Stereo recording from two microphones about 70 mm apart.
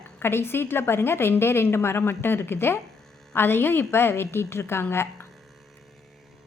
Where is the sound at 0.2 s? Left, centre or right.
Left.